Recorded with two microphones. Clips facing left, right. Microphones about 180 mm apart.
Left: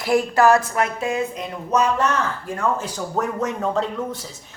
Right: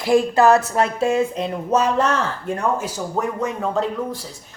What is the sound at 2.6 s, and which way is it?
Speech, 10° right (ahead or behind).